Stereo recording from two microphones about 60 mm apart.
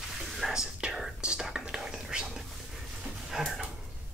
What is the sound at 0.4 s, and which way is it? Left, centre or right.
Whispering, centre.